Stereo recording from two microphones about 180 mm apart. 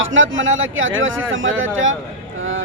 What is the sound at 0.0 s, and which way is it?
A man's voice, 90° right.